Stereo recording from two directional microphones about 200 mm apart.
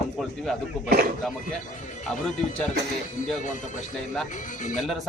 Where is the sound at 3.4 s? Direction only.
40° left (ahead or behind).